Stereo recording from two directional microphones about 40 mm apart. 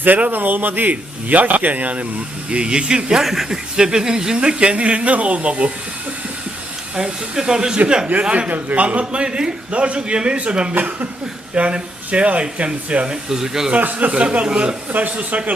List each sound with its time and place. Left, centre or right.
0.0 s a man's voice: right
2.5 s speech: right
3.2 s speech: centre
3.8 s speech: centre; by 5.7 s right
6.9 s speech: centre
8.4 s speech: right
10.8 s speech: right
13.3 s speech: centre
13.7 s a man's voice: right
14.1 s speech: right
14.9 s speech: right